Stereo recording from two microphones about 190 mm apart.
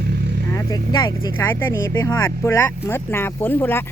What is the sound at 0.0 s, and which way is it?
Vehicle, 60° right (ahead or behind).